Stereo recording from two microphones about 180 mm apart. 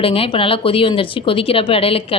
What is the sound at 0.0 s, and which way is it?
A woman's voice, 30° left (ahead or behind).